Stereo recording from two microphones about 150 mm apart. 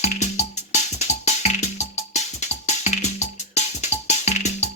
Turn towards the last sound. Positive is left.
turn(degrees=50)  # may be behind; listen again after turning